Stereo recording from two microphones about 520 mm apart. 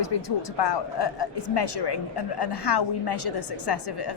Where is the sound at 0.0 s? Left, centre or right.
Left.